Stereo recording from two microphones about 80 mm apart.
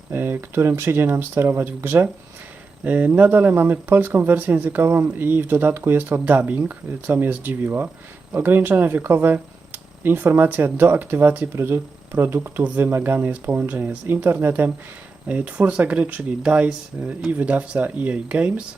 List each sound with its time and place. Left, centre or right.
0.1 s speech: right